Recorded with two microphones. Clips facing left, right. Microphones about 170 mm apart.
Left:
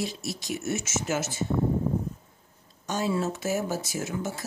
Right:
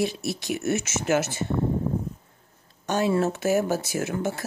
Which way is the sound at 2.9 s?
60° right (ahead or behind).